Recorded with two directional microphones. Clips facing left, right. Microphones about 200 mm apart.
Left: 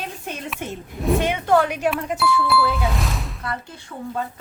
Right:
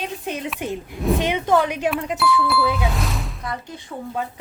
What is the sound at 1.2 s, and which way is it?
Speech, 15° right (ahead or behind).